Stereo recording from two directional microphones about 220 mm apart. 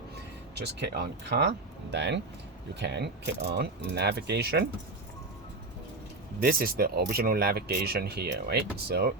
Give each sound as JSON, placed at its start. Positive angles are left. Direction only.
{"t": 0.5, "sound": "speech", "side_deg": -50}
{"t": 6.4, "sound": "speech", "side_deg": -40}